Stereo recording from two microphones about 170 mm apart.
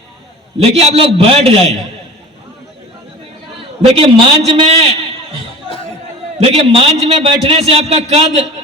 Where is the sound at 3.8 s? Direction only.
35° right (ahead or behind).